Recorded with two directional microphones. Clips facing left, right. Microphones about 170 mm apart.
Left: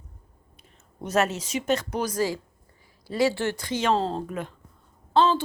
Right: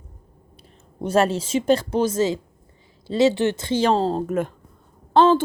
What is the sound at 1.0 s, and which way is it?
A woman's voice, 30° right (ahead or behind).